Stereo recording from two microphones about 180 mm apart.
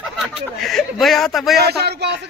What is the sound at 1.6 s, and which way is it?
Speech, 65° right (ahead or behind).